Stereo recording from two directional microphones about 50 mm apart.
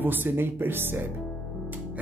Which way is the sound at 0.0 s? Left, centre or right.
Right.